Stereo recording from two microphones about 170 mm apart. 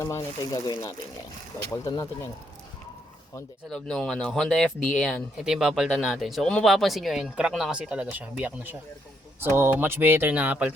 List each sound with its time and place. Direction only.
0.0 s speech: 20° left (ahead or behind)
3.7 s speech: 5° left (ahead or behind)